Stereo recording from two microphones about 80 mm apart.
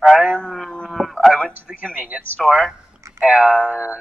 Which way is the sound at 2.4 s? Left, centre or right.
Centre.